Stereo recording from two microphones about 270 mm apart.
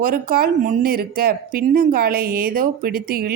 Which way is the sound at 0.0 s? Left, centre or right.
Right.